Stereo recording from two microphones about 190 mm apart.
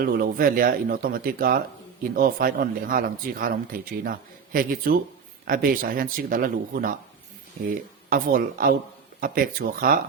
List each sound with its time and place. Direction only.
0.0 s speech: 50° right (ahead or behind)
8.1 s speech: 45° right (ahead or behind)